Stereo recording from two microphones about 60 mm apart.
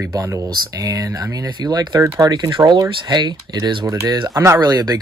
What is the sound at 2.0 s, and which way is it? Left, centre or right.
Speech, right.